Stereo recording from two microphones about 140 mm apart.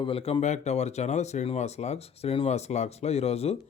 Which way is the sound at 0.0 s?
40° left (ahead or behind).